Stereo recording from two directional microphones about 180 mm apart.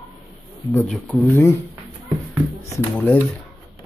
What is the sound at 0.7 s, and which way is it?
Speech, 5° left (ahead or behind).